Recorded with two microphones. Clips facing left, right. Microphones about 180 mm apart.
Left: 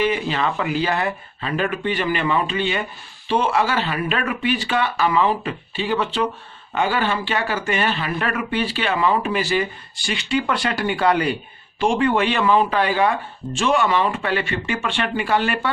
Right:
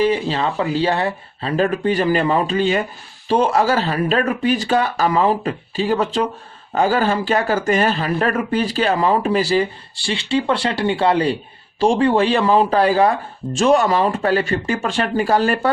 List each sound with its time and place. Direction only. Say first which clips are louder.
0.0 s speech: right 3 dB; 35° right (ahead or behind)